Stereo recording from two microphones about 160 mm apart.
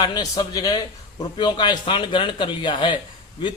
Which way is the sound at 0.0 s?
25° left (ahead or behind).